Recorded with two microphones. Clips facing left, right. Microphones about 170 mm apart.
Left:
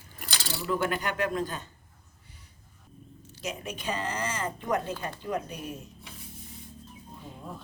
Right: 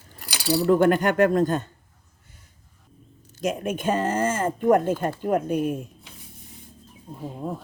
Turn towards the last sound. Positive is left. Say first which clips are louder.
# right 11 dB
turn(degrees=-50)  # may be behind; listen again after turning